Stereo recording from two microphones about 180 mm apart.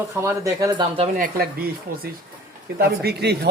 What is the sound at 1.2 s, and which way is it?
Speech, 55° right (ahead or behind).